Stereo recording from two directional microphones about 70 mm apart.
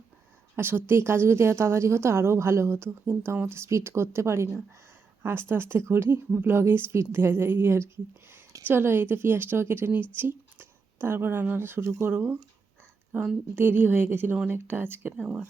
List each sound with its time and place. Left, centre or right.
0.5 s a woman's voice: right
13.6 s a woman's voice: right